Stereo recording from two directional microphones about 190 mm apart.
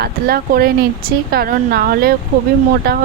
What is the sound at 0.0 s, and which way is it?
Speech, 55° right (ahead or behind).